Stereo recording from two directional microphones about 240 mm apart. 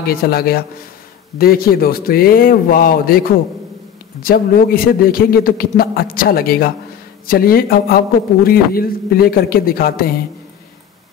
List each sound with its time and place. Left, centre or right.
0.0 s a man's voice: left